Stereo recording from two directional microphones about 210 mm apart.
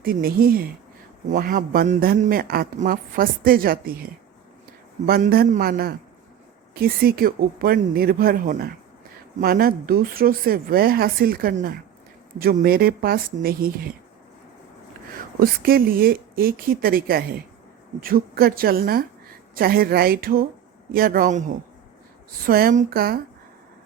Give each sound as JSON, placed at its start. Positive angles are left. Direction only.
{"t": 0.0, "sound": "speech", "side_deg": -45}
{"t": 15.4, "sound": "speech", "side_deg": -45}
{"t": 22.4, "sound": "speech", "side_deg": -45}